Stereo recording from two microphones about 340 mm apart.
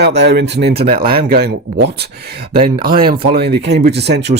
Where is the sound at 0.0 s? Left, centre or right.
Right.